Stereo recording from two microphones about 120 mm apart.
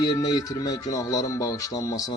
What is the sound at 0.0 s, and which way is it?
Speech, 35° left (ahead or behind).